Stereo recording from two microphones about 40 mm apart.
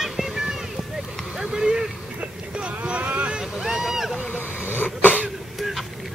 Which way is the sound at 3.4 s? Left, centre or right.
Centre.